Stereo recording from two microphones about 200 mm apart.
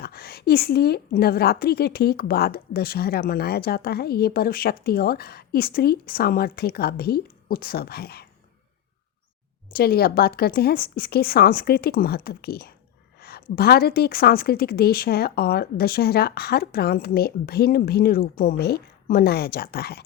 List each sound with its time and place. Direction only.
0.0 s a woman's voice: 50° left (ahead or behind)
9.7 s a woman's voice: 50° left (ahead or behind)